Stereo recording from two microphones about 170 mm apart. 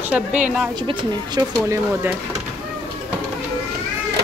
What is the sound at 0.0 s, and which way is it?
Speech, 10° right (ahead or behind).